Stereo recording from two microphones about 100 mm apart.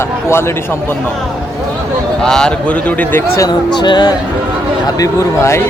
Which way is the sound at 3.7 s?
50° left (ahead or behind).